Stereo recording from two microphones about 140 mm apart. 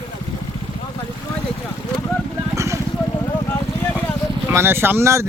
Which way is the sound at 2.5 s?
20° right (ahead or behind).